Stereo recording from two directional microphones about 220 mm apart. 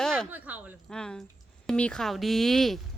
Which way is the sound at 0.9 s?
5° left (ahead or behind).